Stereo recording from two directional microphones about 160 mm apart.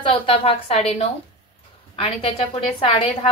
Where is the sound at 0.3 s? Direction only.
35° left (ahead or behind).